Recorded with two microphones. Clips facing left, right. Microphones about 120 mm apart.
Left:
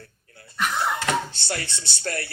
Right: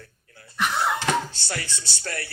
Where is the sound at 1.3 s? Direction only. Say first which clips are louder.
Left 2 dB; 30° left (ahead or behind).